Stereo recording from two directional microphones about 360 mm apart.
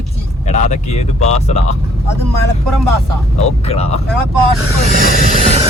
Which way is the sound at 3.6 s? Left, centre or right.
Centre.